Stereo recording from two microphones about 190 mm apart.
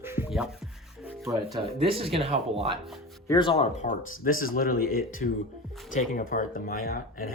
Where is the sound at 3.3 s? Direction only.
25° left (ahead or behind).